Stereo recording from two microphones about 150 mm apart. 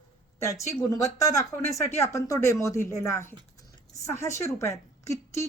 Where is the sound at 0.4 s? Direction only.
20° left (ahead or behind).